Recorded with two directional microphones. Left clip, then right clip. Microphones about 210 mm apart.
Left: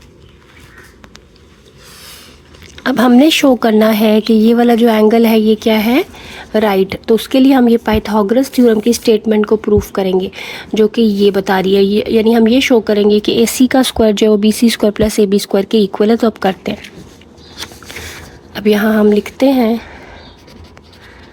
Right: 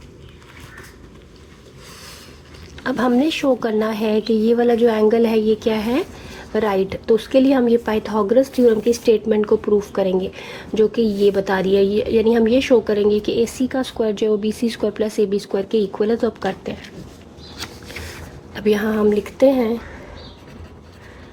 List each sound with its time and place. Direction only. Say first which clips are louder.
2.7 s a woman's voice: left 8 dB; 40° left (ahead or behind)
17.9 s a sound: left 6 dB; 40° left (ahead or behind)
18.5 s a woman's voice: left 6 dB; 40° left (ahead or behind)